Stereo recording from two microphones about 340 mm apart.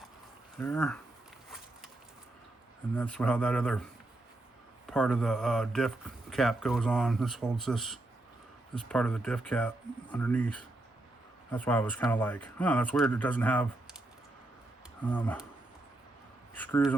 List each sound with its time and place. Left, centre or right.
0.6 s speech: centre
2.9 s speech: centre
4.9 s speech: centre
15.0 s speech: centre
16.6 s speech: centre